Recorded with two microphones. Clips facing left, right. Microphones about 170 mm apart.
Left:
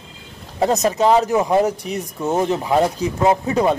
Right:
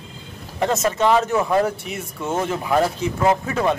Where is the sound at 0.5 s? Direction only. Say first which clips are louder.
Left 3 dB; 35° left (ahead or behind).